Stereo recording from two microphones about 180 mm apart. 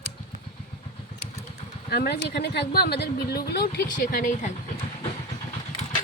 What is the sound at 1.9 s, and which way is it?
Speech, 65° left (ahead or behind).